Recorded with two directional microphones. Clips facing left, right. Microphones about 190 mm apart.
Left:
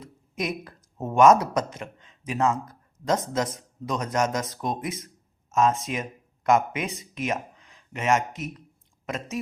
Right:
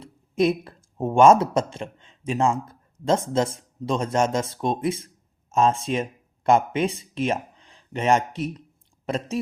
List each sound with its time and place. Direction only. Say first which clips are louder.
0.0 s speech: right 10 dB; 30° right (ahead or behind)